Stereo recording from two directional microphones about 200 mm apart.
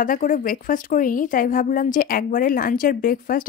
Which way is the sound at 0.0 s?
40° left (ahead or behind).